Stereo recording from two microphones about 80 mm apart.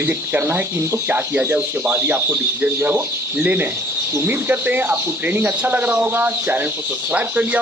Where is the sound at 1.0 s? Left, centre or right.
Right.